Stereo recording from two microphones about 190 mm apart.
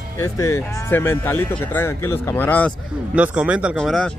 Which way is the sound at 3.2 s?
5° right (ahead or behind).